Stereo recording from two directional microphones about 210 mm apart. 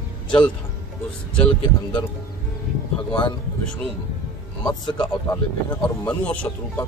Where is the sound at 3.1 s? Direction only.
20° left (ahead or behind).